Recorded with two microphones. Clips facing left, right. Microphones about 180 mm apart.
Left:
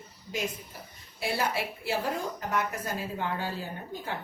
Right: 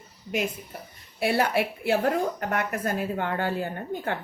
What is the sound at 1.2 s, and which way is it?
A woman's voice, 60° right (ahead or behind).